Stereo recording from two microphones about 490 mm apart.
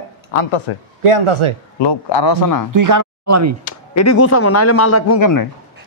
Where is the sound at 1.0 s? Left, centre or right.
Right.